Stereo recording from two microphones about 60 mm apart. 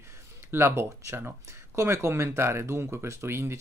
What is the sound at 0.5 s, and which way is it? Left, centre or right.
Speech, right.